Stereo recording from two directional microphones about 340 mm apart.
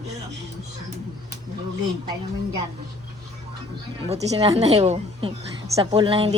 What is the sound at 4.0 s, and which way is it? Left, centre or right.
Speech, centre.